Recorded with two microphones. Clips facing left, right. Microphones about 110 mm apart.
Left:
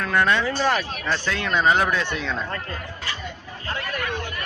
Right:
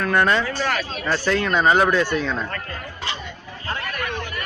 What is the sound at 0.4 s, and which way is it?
Speech, 20° left (ahead or behind).